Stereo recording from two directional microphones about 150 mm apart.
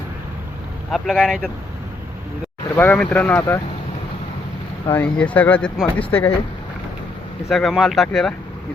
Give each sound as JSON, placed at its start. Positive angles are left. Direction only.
{"t": 0.9, "sound": "speech", "side_deg": 0}
{"t": 2.7, "sound": "speech", "side_deg": 10}
{"t": 3.3, "sound": "speech", "side_deg": 20}
{"t": 4.9, "sound": "speech", "side_deg": 10}
{"t": 7.5, "sound": "speech", "side_deg": 0}